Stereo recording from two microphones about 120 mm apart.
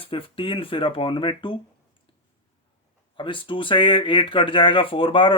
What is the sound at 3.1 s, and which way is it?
Speech, 45° left (ahead or behind).